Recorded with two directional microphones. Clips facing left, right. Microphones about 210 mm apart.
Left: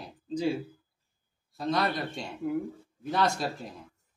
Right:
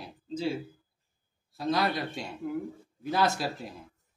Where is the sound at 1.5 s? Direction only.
Centre (ahead or behind).